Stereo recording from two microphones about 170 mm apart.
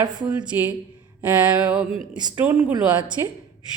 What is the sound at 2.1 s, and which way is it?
Speech, 25° right (ahead or behind).